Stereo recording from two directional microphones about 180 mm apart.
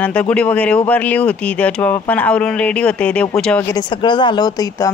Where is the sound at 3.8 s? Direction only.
25° left (ahead or behind).